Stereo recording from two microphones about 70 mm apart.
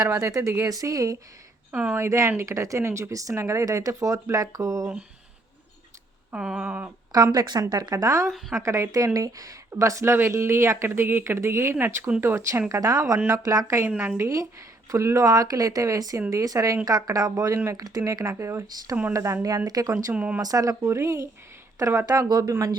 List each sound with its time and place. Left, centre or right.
0.1 s speech: right
0.6 s speech: right
1.7 s a sound: centre
2.0 s speech: right
6.3 s a sound: centre
7.3 s speech: right
7.6 s speech: right
12.6 s speech: right
13.8 s a woman's voice: right
14.2 s speech: right
20.1 s a sound: centre
20.4 s speech: right
22.0 s speech: right